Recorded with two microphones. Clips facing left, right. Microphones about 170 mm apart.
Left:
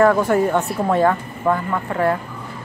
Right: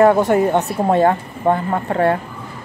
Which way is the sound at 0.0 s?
20° right (ahead or behind).